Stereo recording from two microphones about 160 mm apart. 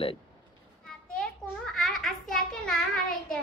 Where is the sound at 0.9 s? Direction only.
5° left (ahead or behind).